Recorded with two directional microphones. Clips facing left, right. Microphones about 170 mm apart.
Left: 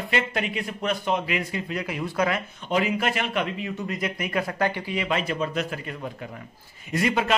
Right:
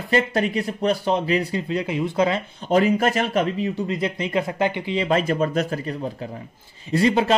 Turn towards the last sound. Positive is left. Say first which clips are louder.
# right 5 dB
turn(degrees=-30)  # may be behind; listen again after turning